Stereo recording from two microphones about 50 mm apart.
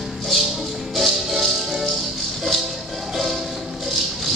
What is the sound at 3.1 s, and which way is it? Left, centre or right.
Music, centre.